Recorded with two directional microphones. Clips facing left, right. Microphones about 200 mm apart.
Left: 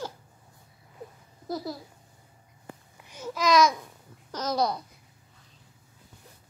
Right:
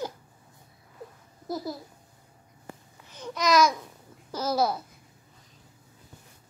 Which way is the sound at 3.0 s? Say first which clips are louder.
Left 1 dB; 5° left (ahead or behind).